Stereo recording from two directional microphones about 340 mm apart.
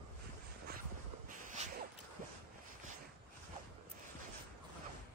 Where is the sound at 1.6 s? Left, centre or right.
Centre.